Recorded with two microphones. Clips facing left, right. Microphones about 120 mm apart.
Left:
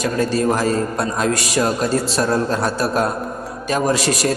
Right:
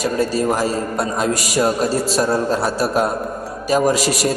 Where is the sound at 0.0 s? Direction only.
5° right (ahead or behind).